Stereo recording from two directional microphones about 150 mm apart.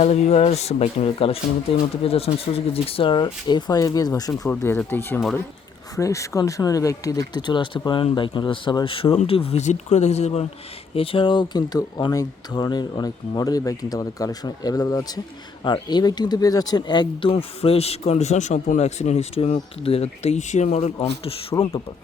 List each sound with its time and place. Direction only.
0.0 s speech: 45° left (ahead or behind)
21.5 s speech: 20° left (ahead or behind)